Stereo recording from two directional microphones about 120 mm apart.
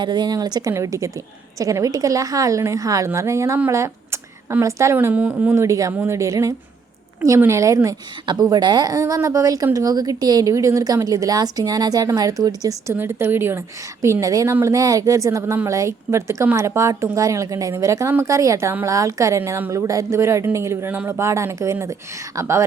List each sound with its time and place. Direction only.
0.0 s a woman's voice: 35° right (ahead or behind)
4.9 s a woman's voice: 15° right (ahead or behind)
5.6 s a woman's voice: 30° right (ahead or behind)
12.9 s a woman's voice: 20° right (ahead or behind)